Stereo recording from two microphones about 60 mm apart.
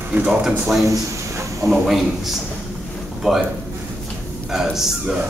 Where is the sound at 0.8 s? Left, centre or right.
Right.